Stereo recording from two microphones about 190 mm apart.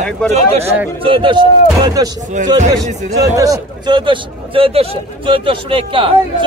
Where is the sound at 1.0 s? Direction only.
25° right (ahead or behind).